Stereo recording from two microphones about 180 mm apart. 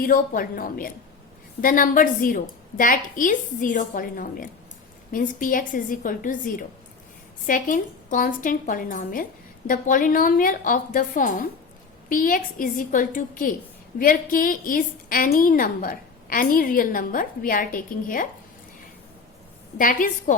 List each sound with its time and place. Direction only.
0.0 s a woman's voice: 50° left (ahead or behind)
19.8 s a woman's voice: 50° left (ahead or behind)